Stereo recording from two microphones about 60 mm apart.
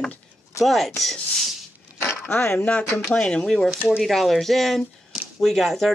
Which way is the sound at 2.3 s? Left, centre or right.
Left.